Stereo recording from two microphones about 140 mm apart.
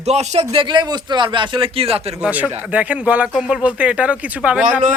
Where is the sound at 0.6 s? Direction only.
30° right (ahead or behind).